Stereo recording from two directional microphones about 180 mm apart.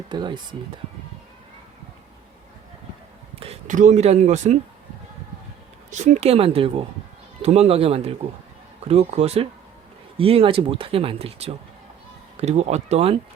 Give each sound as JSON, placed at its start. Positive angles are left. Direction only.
{"t": 0.1, "sound": "speech", "side_deg": -25}
{"t": 3.4, "sound": "speech", "side_deg": -40}
{"t": 5.9, "sound": "speech", "side_deg": -40}